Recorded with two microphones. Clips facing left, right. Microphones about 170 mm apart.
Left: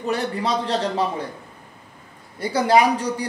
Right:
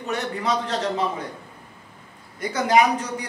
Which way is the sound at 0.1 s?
35° left (ahead or behind).